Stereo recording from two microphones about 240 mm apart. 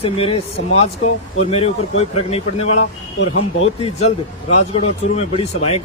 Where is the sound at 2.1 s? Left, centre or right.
Left.